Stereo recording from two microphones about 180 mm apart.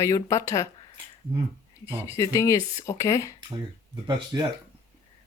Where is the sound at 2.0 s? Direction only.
15° left (ahead or behind).